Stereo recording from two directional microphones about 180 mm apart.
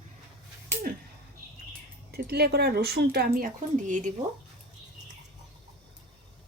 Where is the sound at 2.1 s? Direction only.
60° right (ahead or behind); by 4.1 s 45° right (ahead or behind).